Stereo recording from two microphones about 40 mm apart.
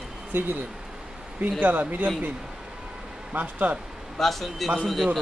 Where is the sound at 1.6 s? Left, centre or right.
Right.